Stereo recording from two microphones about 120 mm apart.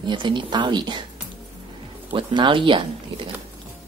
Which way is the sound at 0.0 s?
40° right (ahead or behind).